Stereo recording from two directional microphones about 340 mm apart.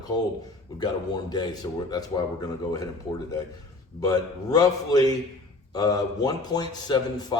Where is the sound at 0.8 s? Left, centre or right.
Centre.